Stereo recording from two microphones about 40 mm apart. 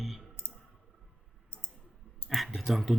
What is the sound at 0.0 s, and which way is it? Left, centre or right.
Clicking, centre.